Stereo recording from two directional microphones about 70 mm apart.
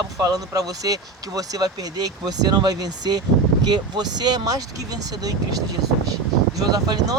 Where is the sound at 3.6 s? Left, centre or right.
Right.